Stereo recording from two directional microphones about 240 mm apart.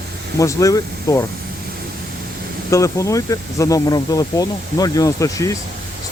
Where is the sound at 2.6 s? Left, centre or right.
Centre.